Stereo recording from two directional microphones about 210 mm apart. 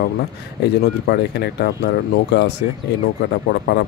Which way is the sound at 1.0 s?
50° left (ahead or behind).